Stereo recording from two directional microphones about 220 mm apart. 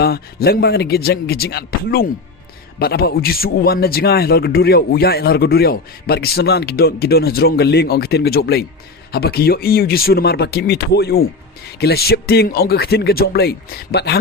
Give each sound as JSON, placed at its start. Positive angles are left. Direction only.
{"t": 0.0, "sound": "a man's voice", "side_deg": 45}